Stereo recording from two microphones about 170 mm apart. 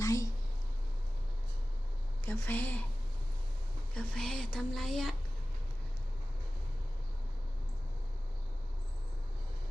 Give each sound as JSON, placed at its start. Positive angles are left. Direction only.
{"t": 0.0, "sound": "a sound", "side_deg": 20}
{"t": 2.2, "sound": "a woman's voice", "side_deg": 15}
{"t": 3.9, "sound": "a woman's voice", "side_deg": 5}